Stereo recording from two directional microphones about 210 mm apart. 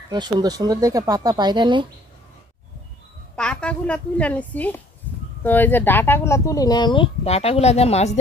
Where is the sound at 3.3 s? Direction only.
5° left (ahead or behind); by 8.1 s 30° left (ahead or behind).